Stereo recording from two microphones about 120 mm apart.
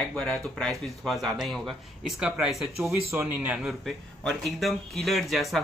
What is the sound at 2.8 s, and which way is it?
Speech, 20° right (ahead or behind).